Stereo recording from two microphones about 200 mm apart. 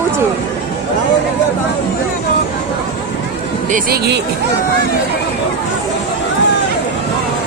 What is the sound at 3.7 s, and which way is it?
Speech, 50° right (ahead or behind).